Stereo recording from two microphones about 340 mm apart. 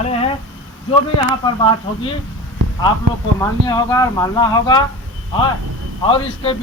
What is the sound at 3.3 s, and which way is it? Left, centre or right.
Speech, centre.